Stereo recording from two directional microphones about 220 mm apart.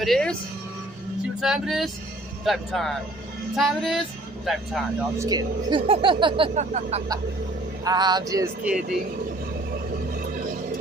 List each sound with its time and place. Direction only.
0.0 s speech: centre (ahead or behind)
1.4 s speech: centre (ahead or behind)
5.1 s speech: 15° right (ahead or behind); by 7.0 s 30° right (ahead or behind)
7.9 s music: 20° right (ahead or behind)